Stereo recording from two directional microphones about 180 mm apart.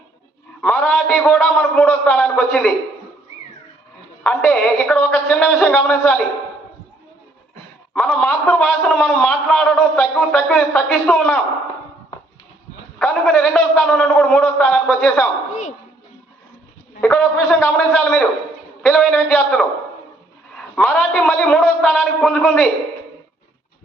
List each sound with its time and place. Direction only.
0.6 s a man's voice: 5° left (ahead or behind)
4.2 s a man's voice: 5° left (ahead or behind)
8.1 s a man's voice: 5° left (ahead or behind)
13.0 s a man's voice: 5° left (ahead or behind)
15.4 s a sound: 40° left (ahead or behind)
17.2 s a man's voice: 5° left (ahead or behind)
20.7 s a man's voice: 5° left (ahead or behind)